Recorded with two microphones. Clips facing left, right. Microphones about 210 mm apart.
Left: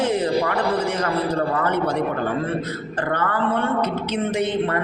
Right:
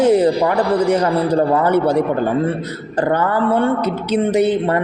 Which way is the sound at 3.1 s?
35° right (ahead or behind).